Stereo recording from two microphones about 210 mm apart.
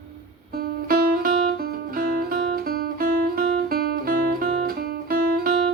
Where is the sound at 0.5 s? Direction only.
45° right (ahead or behind).